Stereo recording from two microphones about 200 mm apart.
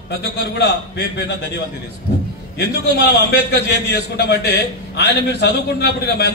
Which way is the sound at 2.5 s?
55° left (ahead or behind).